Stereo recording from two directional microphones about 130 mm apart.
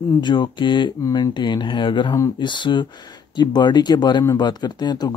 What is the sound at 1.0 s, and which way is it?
Speech, 25° left (ahead or behind).